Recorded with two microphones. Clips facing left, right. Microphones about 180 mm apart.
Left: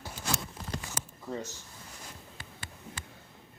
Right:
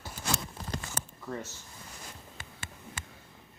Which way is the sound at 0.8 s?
15° left (ahead or behind).